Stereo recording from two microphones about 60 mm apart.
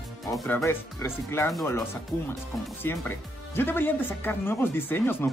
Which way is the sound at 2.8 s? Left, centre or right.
Left.